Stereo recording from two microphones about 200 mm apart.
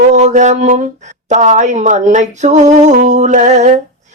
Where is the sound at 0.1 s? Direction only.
35° right (ahead or behind).